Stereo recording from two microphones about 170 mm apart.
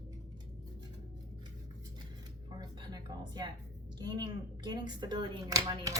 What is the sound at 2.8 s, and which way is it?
Speech, 25° right (ahead or behind).